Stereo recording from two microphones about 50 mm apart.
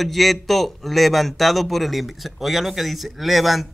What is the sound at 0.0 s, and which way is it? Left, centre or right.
Speech, centre.